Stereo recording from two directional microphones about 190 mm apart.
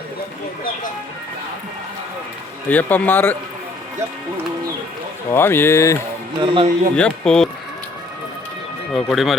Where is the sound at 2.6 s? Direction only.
10° left (ahead or behind).